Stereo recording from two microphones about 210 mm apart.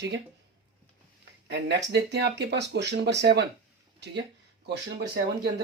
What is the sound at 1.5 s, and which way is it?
Speech, 55° right (ahead or behind).